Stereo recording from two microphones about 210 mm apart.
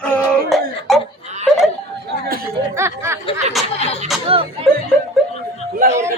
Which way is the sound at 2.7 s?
15° right (ahead or behind).